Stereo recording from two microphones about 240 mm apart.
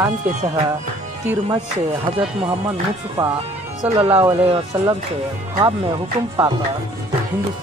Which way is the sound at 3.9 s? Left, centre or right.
Centre.